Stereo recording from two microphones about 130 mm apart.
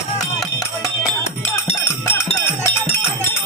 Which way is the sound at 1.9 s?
20° left (ahead or behind).